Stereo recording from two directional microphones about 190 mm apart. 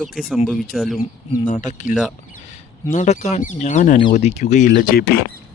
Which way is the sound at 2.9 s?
40° left (ahead or behind).